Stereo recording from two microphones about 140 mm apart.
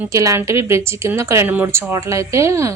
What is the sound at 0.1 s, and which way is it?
A woman's voice, 25° right (ahead or behind).